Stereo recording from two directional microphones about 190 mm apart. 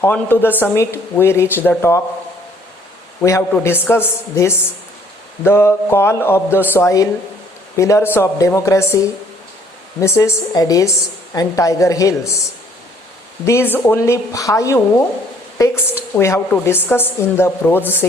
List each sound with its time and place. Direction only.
0.0 s a woman's voice: 10° left (ahead or behind)
3.2 s a woman's voice: 15° left (ahead or behind)
10.0 s a woman's voice: 15° left (ahead or behind)
13.4 s a woman's voice: 15° left (ahead or behind)